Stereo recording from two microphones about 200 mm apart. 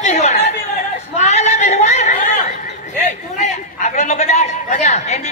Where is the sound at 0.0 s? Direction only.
35° left (ahead or behind).